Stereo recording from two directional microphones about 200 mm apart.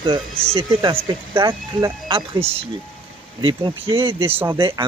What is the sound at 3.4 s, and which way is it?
Speech, 25° right (ahead or behind).